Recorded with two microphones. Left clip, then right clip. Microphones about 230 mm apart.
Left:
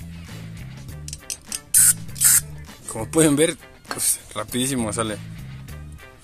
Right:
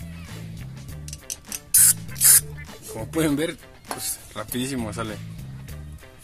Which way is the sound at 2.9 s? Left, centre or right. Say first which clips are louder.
Left 6 dB; left.